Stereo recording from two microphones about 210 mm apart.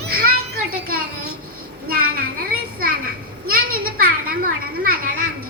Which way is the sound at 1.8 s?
45° right (ahead or behind).